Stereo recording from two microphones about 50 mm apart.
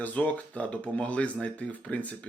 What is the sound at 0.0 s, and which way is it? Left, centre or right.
Speech, left.